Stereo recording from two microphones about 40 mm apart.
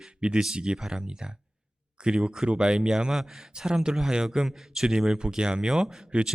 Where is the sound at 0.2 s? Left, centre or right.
Right.